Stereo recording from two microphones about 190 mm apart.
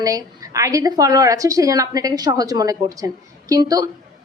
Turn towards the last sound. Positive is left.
turn(degrees=-20)  # may be behind; listen again after turning